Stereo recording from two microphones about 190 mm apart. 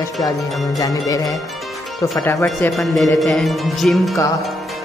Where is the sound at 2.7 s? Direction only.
Centre (ahead or behind).